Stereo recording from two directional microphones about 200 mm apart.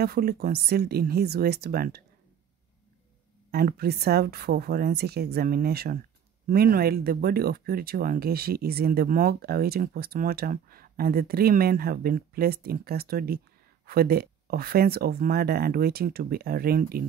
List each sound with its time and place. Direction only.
0.0 s speech: 50° right (ahead or behind)
3.5 s speech: 50° right (ahead or behind)